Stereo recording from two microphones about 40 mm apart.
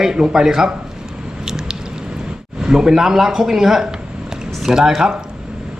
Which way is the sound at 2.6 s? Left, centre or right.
Centre.